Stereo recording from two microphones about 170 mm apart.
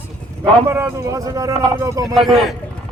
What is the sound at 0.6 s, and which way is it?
A man's voice, 15° right (ahead or behind).